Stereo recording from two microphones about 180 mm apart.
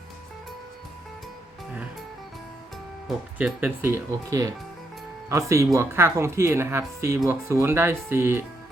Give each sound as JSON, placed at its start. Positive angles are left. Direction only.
{"t": 3.1, "sound": "speech", "side_deg": -5}